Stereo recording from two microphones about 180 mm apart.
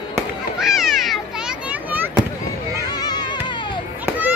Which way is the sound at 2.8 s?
20° left (ahead or behind).